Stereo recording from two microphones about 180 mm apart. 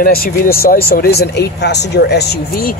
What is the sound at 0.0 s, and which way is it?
Speech, 55° left (ahead or behind).